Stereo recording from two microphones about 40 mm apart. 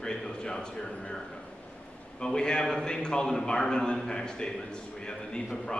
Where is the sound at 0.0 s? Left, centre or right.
Centre.